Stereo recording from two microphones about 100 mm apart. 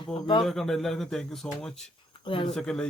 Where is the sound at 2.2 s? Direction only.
60° left (ahead or behind).